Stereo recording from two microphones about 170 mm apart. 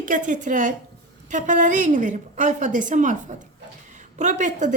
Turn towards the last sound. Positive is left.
turn(degrees=-45)  # may be behind; listen again after turning